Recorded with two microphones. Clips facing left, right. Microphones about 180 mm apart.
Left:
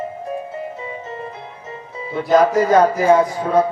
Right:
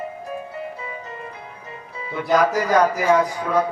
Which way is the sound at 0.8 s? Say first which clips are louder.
Left 4 dB; 25° left (ahead or behind).